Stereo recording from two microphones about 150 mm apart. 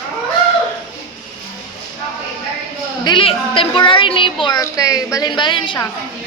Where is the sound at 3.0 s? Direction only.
35° left (ahead or behind).